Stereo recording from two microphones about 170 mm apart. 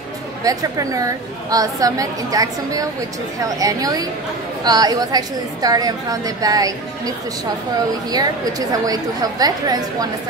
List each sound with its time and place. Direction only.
0.4 s a woman's voice: 20° right (ahead or behind)